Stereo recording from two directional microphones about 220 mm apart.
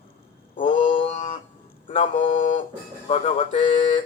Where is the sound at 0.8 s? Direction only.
25° left (ahead or behind).